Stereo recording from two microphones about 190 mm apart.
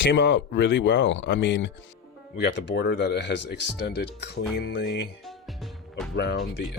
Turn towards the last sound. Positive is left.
turn(degrees=60)  # may be behind; listen again after turning